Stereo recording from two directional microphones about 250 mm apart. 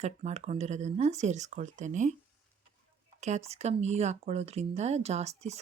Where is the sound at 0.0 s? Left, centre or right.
Right.